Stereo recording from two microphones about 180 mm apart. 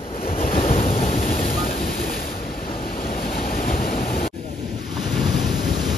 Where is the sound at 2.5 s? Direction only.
55° left (ahead or behind).